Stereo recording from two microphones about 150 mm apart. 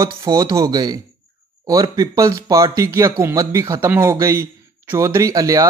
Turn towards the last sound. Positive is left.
turn(degrees=-20)  # may be behind; listen again after turning